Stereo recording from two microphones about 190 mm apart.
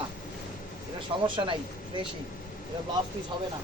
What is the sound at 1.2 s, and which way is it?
Speech, 25° right (ahead or behind).